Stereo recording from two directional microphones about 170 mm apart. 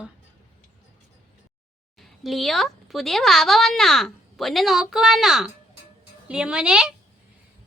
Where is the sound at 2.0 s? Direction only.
Centre (ahead or behind).